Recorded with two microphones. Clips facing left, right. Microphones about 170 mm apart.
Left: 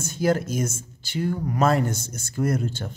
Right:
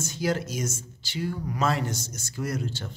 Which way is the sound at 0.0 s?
55° left (ahead or behind).